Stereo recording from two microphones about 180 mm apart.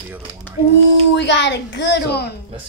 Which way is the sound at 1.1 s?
80° left.